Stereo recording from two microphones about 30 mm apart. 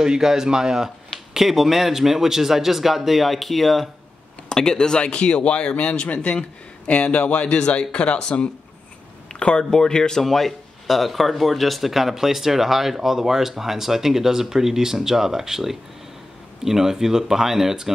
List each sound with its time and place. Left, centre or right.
0.0 s speech: centre
1.3 s speech: centre
4.5 s a man's voice: left
7.4 s speech: left
9.6 s speech: left
10.2 s speech: centre